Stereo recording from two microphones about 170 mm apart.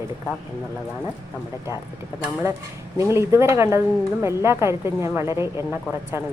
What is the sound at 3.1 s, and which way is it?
Speech, 15° right (ahead or behind).